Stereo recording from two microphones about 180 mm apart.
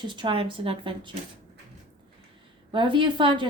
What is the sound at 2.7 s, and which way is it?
Speech, 25° right (ahead or behind).